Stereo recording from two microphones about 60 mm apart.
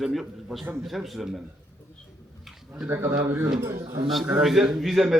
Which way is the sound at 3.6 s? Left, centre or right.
Right.